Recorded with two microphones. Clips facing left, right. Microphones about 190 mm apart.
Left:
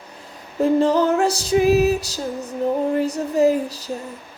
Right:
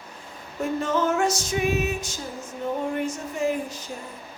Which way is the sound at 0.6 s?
35° left (ahead or behind).